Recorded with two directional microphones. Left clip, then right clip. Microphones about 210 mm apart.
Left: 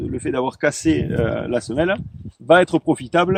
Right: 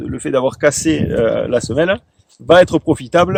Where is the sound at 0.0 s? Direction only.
45° right (ahead or behind).